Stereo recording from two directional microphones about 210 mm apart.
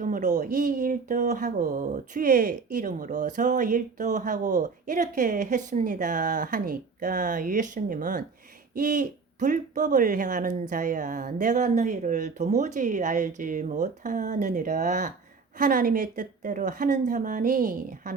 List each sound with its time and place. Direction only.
0.0 s speech: 35° right (ahead or behind)